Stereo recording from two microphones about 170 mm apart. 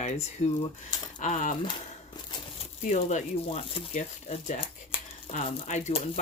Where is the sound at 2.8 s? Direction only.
45° left (ahead or behind).